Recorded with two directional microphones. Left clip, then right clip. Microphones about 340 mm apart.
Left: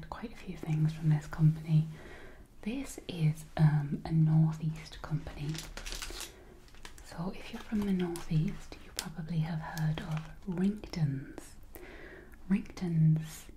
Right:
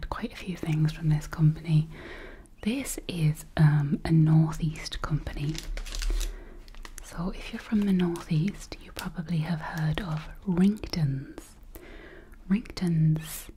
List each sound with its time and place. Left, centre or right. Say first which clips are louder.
0.0 s speech: right 8 dB; right
7.2 s speech: right 5 dB; right
12.4 s speech: right 5 dB; right